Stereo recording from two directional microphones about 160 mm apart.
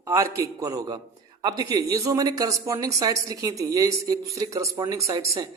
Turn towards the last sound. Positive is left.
turn(degrees=-20)  # may be behind; listen again after turning